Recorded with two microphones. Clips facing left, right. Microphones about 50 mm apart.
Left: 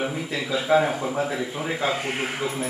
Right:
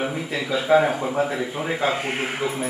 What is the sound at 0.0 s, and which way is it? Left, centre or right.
A man's voice, centre.